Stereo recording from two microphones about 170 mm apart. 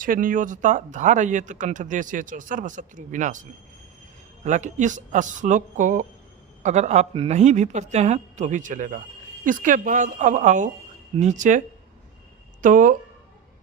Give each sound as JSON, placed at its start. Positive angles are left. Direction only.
{"t": 0.0, "sound": "speech", "side_deg": -55}
{"t": 4.4, "sound": "speech", "side_deg": -45}
{"t": 12.6, "sound": "speech", "side_deg": -50}